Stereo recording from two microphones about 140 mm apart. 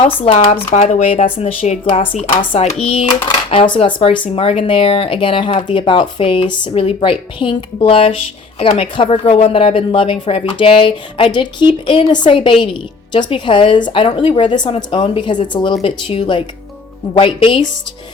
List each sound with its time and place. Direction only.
0.0 s a woman's voice: 40° left (ahead or behind)
0.7 s a woman's voice: 55° left (ahead or behind); by 17.7 s 40° left (ahead or behind)